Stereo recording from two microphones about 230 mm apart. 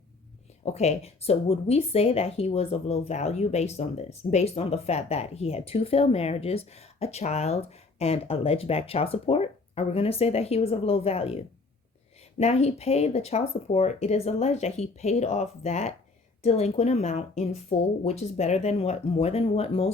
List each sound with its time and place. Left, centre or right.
0.6 s speech: left